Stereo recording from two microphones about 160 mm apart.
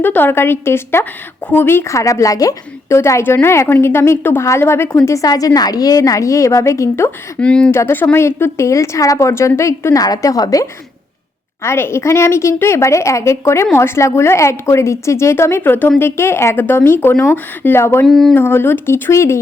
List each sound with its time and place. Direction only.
0.0 s a woman's voice: 10° left (ahead or behind)
18.0 s a sound: centre (ahead or behind)
18.3 s a woman's voice: 15° left (ahead or behind)